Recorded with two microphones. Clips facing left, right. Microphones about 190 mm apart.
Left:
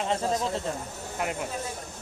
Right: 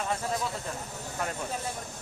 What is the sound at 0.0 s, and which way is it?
Speech, 25° left (ahead or behind).